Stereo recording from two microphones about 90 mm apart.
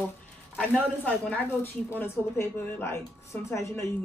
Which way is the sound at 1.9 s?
25° left (ahead or behind).